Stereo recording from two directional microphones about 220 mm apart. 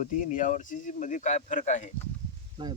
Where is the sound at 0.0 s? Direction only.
35° left (ahead or behind).